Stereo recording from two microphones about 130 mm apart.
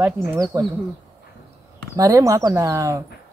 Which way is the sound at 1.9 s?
25° right (ahead or behind).